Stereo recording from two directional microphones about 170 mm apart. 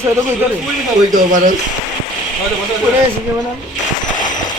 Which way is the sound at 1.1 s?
50° right (ahead or behind).